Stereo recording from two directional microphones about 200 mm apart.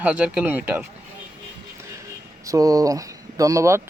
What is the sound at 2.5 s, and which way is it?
Speech, 15° right (ahead or behind).